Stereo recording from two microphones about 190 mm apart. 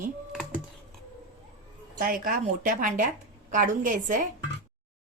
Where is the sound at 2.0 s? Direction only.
50° right (ahead or behind).